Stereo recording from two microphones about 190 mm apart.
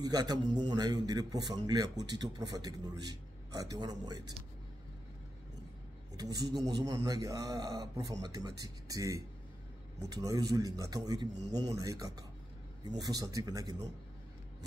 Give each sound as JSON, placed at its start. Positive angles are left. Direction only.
{"t": 0.0, "sound": "a man's voice", "side_deg": -20}
{"t": 6.1, "sound": "a man's voice", "side_deg": -20}
{"t": 10.2, "sound": "a man's voice", "side_deg": -20}